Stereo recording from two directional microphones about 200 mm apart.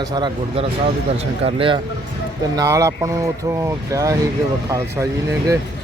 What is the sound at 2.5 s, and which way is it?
Speech, 15° right (ahead or behind).